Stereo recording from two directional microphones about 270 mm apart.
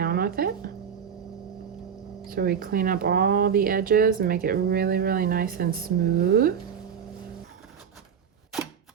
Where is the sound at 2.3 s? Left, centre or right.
Right.